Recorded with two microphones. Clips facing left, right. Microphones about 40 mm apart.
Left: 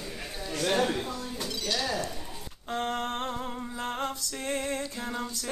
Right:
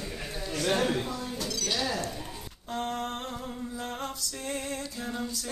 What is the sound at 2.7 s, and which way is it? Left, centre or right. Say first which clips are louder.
Music: left 2 dB; left.